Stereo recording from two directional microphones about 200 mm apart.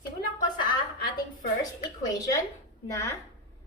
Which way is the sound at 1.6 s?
15° left (ahead or behind).